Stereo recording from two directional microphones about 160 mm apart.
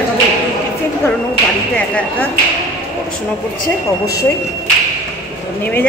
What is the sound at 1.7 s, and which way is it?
Speech, 10° left (ahead or behind).